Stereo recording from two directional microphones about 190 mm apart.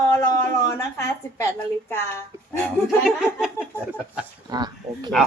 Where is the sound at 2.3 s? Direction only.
15° right (ahead or behind).